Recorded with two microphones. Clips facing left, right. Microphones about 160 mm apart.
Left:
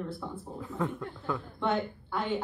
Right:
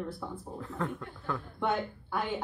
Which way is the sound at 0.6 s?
5° left (ahead or behind).